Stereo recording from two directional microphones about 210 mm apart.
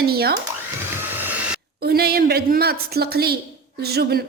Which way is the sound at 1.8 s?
50° right (ahead or behind).